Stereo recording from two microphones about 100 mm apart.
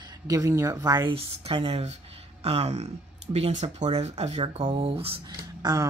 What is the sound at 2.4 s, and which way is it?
Speech, 85° right.